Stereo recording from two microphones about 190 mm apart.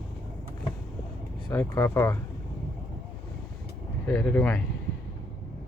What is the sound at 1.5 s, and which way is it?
Speech, 15° left (ahead or behind).